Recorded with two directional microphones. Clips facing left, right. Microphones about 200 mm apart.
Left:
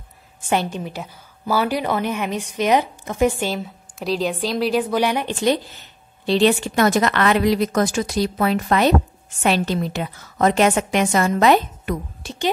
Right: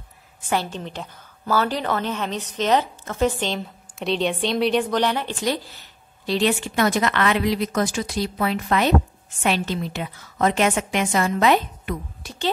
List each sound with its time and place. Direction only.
0.5 s a woman's voice: 15° left (ahead or behind)
6.2 s a woman's voice: 30° left (ahead or behind)
6.7 s a woman's voice: 40° left (ahead or behind)
12.2 s a woman's voice: 25° left (ahead or behind)